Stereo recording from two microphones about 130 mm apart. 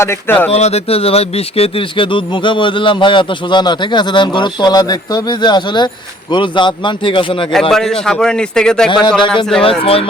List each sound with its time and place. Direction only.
0.0 s speech: 20° left (ahead or behind)
0.5 s speech: 55° left (ahead or behind)
7.7 s a man's voice: 5° left (ahead or behind)
9.0 s speech: 35° left (ahead or behind)
9.6 s speech: 45° left (ahead or behind)